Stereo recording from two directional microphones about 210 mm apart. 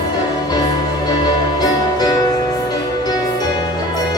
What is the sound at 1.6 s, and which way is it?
Music, 20° left (ahead or behind).